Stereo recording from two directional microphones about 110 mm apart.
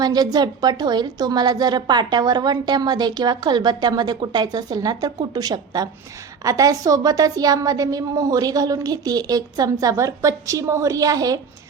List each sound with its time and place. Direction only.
0.0 s a woman's voice: 40° right (ahead or behind)